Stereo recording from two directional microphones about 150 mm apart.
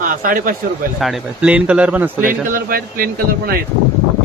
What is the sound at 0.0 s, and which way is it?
Speech, 70° right (ahead or behind).